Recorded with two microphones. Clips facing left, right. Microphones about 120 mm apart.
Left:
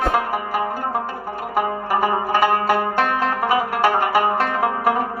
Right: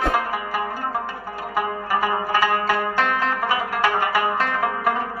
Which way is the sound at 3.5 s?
30° left (ahead or behind).